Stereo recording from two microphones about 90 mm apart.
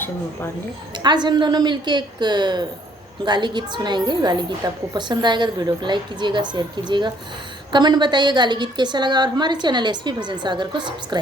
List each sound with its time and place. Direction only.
1.0 s a woman's voice: 55° right (ahead or behind)